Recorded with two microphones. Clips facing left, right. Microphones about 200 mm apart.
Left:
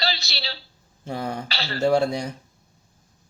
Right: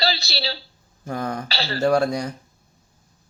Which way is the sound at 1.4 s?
35° right (ahead or behind).